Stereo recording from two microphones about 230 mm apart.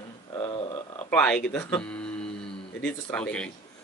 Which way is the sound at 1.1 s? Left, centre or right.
Centre.